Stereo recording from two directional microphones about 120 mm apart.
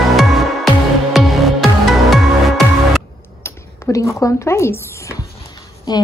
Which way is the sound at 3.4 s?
20° left (ahead or behind).